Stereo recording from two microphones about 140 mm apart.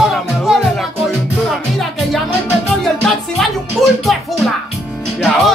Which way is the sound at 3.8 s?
Centre (ahead or behind).